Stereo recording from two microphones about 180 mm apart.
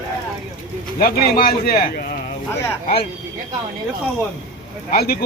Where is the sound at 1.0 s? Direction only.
55° left (ahead or behind).